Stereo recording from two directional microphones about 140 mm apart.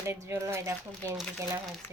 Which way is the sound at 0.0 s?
20° right (ahead or behind).